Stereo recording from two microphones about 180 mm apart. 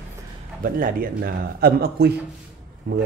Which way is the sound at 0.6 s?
50° right (ahead or behind).